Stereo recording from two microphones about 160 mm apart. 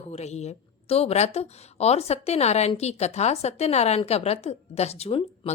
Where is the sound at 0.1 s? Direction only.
45° left (ahead or behind).